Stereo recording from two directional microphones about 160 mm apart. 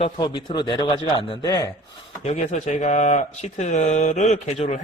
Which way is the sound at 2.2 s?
45° left (ahead or behind).